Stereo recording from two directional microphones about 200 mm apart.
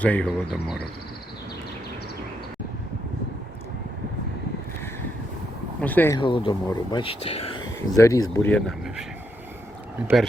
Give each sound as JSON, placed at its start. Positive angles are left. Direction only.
{"t": 0.0, "sound": "speech", "side_deg": 5}
{"t": 5.8, "sound": "speech", "side_deg": 10}
{"t": 6.1, "sound": "speech", "side_deg": 25}
{"t": 7.9, "sound": "speech", "side_deg": 15}